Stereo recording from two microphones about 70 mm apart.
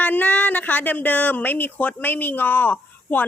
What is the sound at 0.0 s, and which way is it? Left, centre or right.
Speech, left.